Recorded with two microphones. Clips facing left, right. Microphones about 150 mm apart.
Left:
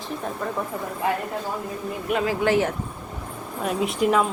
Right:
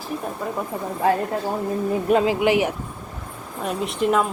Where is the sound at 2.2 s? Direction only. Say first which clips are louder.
Right 2 dB; 15° right (ahead or behind).